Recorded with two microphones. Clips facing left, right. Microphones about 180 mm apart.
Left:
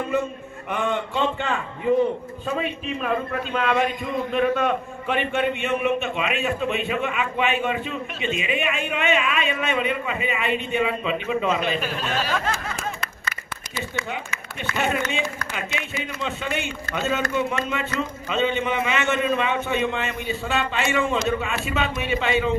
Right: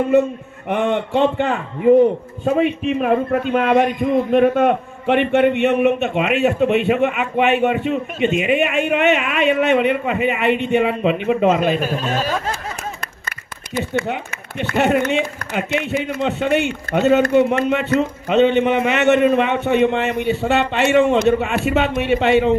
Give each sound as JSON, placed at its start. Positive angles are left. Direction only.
{"t": 0.9, "sound": "a man's voice", "side_deg": -65}
{"t": 13.7, "sound": "a man's voice", "side_deg": -60}